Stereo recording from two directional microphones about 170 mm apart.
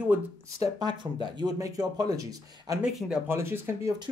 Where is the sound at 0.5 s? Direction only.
25° right (ahead or behind).